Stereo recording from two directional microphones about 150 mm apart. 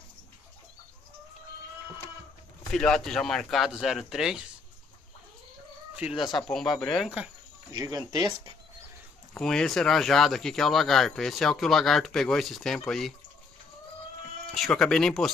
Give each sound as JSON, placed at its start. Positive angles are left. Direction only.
{"t": 2.7, "sound": "speech", "side_deg": 5}
{"t": 6.1, "sound": "speech", "side_deg": 30}
{"t": 6.9, "sound": "speech", "side_deg": 0}
{"t": 7.7, "sound": "speech", "side_deg": -25}
{"t": 9.3, "sound": "speech", "side_deg": 5}
{"t": 14.5, "sound": "speech", "side_deg": 0}